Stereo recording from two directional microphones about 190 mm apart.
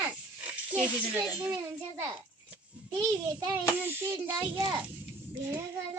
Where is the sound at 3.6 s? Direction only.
10° right (ahead or behind).